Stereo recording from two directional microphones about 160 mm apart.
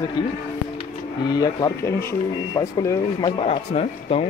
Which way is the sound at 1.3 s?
25° left (ahead or behind).